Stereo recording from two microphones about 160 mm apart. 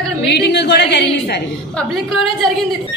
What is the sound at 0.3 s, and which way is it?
A woman's voice, 90° left.